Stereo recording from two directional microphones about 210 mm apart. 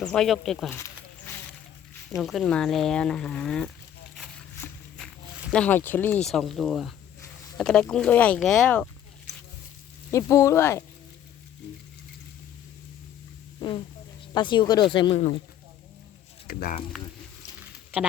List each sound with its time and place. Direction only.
0.0 s speech: 5° left (ahead or behind)
0.8 s a sound: 10° left (ahead or behind)
2.2 s speech: centre (ahead or behind)
4.9 s walk: centre (ahead or behind)
5.6 s speech: 10° left (ahead or behind)
10.1 s speech: 15° left (ahead or behind)
13.6 s speech: 20° left (ahead or behind)
16.5 s speech: 45° left (ahead or behind)